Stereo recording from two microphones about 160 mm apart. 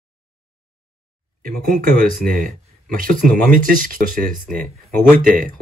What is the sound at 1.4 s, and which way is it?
Speech, 60° right (ahead or behind).